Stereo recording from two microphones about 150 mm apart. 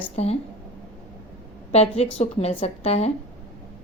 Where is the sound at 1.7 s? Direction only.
45° left (ahead or behind).